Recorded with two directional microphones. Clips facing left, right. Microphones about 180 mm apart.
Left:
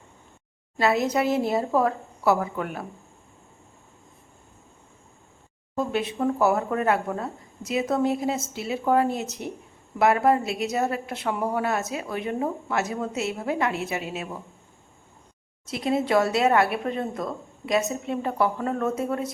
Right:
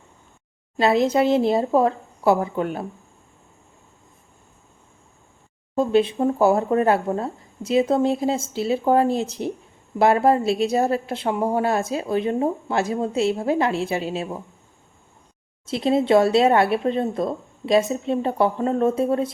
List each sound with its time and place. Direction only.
0.8 s a woman's voice: 25° right (ahead or behind)
5.7 s a woman's voice: 25° right (ahead or behind)
15.6 s a woman's voice: 25° right (ahead or behind)